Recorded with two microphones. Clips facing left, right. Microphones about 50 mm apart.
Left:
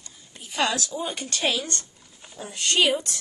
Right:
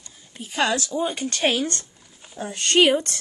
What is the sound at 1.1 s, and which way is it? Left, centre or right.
Speech, right.